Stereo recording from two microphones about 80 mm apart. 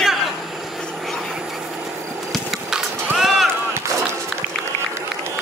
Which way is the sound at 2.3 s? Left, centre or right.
Centre.